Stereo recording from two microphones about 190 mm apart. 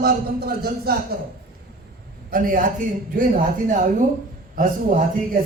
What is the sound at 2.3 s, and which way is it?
Speech, 45° right (ahead or behind).